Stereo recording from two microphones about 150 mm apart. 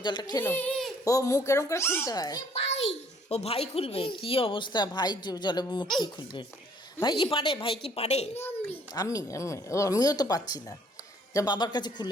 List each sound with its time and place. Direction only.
0.0 s speech: 30° left (ahead or behind)
0.4 s a child's voice: 15° left (ahead or behind)
2.5 s a child's voice: 45° left (ahead or behind)
8.4 s a child's voice: 15° left (ahead or behind)